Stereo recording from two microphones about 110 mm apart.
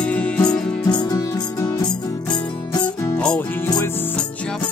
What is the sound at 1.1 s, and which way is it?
Music, 30° left (ahead or behind).